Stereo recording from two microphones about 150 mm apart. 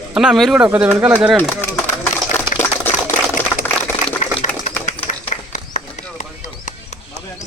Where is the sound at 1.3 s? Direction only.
10° left (ahead or behind).